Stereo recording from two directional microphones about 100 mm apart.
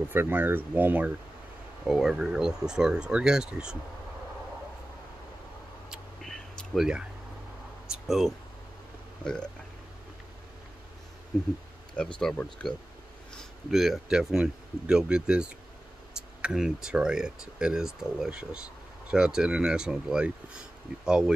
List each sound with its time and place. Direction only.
0.1 s speech: 20° right (ahead or behind)
1.9 s speech: 5° right (ahead or behind)
6.2 s a sound: 5° left (ahead or behind)
7.9 s speech: centre (ahead or behind)
12.0 s speech: 10° left (ahead or behind); by 21.3 s 10° right (ahead or behind)